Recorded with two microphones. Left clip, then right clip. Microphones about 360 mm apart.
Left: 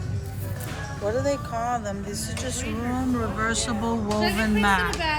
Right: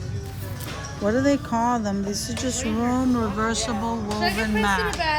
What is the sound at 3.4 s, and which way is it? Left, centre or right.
A woman's voice, centre.